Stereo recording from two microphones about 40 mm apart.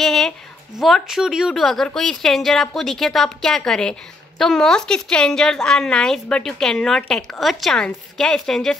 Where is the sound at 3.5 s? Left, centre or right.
Centre.